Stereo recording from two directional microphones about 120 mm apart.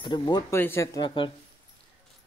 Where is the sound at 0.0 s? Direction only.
40° left (ahead or behind).